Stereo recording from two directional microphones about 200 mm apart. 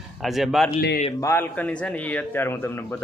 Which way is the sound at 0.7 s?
45° left (ahead or behind).